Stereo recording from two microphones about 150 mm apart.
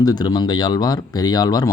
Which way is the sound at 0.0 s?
25° left (ahead or behind).